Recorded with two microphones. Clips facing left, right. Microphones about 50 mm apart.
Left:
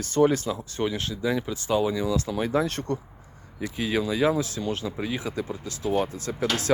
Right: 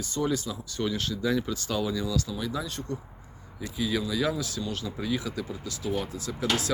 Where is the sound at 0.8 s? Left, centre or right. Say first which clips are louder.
Even; left.